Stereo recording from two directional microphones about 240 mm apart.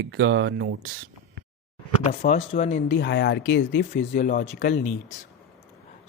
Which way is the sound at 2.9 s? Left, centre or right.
Left.